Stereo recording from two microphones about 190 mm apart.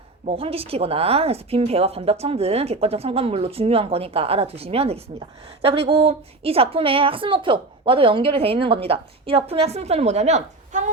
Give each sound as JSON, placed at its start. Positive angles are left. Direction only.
{"t": 0.3, "sound": "a woman's voice", "side_deg": -30}